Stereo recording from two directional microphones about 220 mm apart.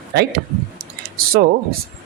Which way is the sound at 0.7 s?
45° right (ahead or behind).